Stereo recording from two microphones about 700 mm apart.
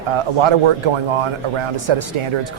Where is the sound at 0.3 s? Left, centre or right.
Right.